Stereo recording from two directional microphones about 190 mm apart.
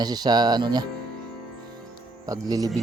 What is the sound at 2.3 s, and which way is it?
Speech, 20° right (ahead or behind).